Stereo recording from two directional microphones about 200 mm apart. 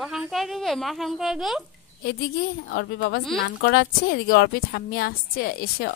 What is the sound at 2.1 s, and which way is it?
A woman's voice, 50° left (ahead or behind).